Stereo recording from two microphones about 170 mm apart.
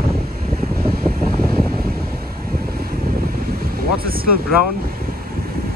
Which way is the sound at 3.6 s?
60° right (ahead or behind).